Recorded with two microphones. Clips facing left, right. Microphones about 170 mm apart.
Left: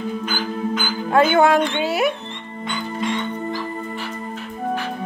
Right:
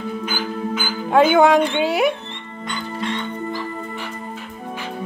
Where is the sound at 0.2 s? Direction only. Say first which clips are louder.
Left 1 dB; 10° right (ahead or behind).